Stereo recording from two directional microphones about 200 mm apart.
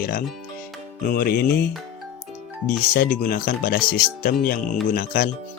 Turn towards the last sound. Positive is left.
turn(degrees=45)  # may be behind; listen again after turning